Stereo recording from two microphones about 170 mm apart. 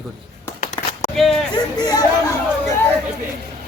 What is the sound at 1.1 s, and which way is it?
Speech, centre (ahead or behind).